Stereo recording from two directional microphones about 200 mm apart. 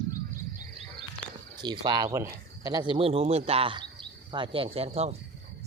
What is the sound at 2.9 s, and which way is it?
Speech, 30° right (ahead or behind).